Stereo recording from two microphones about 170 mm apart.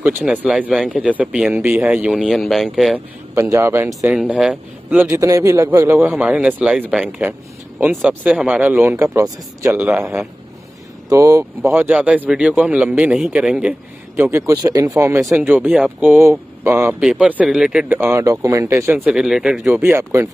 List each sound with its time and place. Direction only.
0.0 s speech: 5° right (ahead or behind)
3.3 s speech: 15° right (ahead or behind)
5.0 s speech: 20° right (ahead or behind)
11.1 s speech: 20° right (ahead or behind)
19.0 s speech: 5° right (ahead or behind)
19.8 s speech: 15° right (ahead or behind)